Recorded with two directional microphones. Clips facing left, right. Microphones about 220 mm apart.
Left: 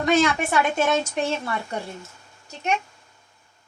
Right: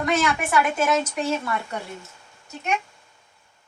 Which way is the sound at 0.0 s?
25° left (ahead or behind).